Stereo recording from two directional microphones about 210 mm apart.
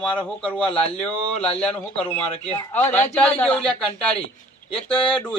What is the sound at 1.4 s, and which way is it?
Speech, 30° left (ahead or behind).